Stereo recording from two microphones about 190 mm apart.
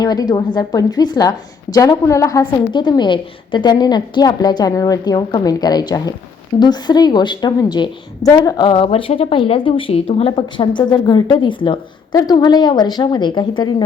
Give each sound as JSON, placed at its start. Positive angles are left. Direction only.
{"t": 0.0, "sound": "a woman's voice", "side_deg": 20}